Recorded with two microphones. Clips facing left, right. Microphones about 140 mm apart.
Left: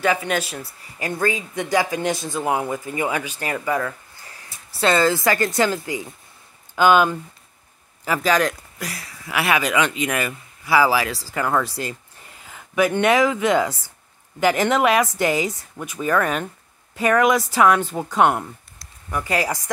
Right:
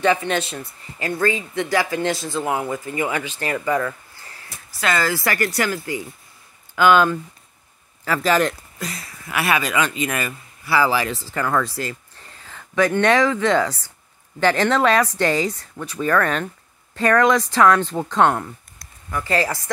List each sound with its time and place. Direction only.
0.0 s speech: 5° left (ahead or behind)
4.7 s speech: 25° left (ahead or behind)
8.2 s speech: centre (ahead or behind)